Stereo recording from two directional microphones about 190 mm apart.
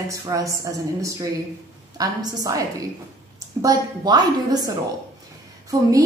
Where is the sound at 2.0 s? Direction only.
20° right (ahead or behind).